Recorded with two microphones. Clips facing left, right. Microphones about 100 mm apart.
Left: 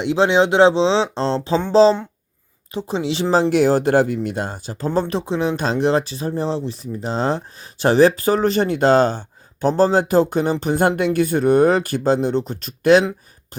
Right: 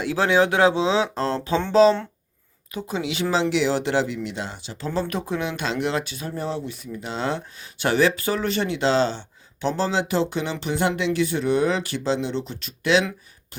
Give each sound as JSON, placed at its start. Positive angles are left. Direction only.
{"t": 0.0, "sound": "speech", "side_deg": 20}
{"t": 3.5, "sound": "speech", "side_deg": 45}
{"t": 4.9, "sound": "speech", "side_deg": 30}
{"t": 13.5, "sound": "a sound", "side_deg": 35}